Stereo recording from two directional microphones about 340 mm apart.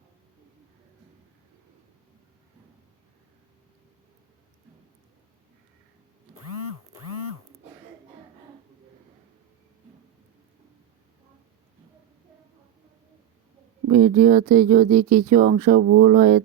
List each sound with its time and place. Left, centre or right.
13.9 s speech: right